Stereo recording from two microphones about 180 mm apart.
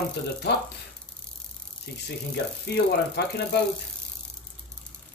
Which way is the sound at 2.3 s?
65° left (ahead or behind).